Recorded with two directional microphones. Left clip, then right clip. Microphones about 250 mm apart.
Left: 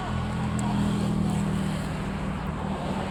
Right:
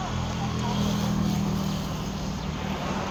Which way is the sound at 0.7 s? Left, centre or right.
Right.